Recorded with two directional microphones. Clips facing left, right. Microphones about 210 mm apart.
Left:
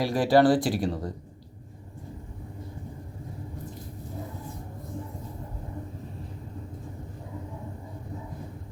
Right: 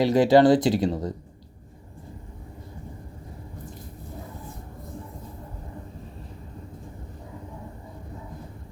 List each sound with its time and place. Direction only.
0.0 s speech: 20° right (ahead or behind)